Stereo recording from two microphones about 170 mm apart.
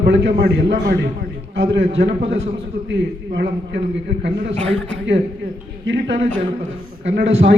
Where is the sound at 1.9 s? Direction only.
90° right.